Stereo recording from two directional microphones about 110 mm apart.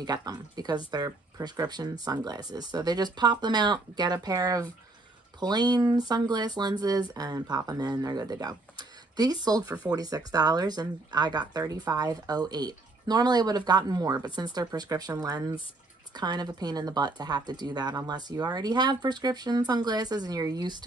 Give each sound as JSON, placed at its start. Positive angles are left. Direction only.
{"t": 0.0, "sound": "speech", "side_deg": -35}